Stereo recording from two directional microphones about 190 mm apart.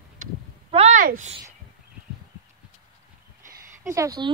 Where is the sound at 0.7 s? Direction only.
35° right (ahead or behind).